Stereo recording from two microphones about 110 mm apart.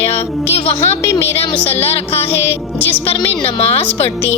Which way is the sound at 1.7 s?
65° left (ahead or behind).